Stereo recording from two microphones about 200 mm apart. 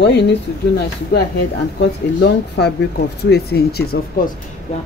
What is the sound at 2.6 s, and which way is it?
Speech, 55° left (ahead or behind).